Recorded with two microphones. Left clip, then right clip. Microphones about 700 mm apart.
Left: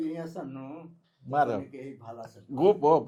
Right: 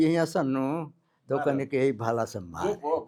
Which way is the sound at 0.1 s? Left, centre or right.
Right.